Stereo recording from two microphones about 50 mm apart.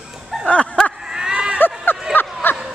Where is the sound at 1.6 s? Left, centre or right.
Left.